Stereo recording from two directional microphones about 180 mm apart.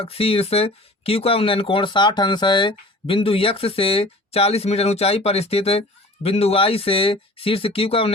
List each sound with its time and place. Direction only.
0.0 s speech: 35° left (ahead or behind)